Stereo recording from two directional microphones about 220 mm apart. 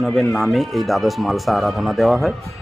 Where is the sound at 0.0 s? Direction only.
Centre (ahead or behind).